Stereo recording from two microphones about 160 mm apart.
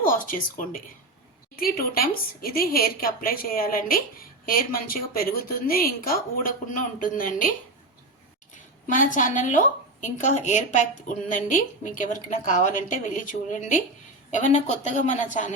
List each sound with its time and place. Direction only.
0.1 s a woman's voice: 60° left (ahead or behind)
8.9 s a woman's voice: 55° left (ahead or behind)